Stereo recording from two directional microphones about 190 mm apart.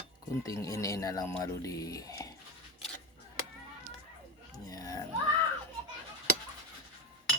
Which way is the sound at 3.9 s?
90° right.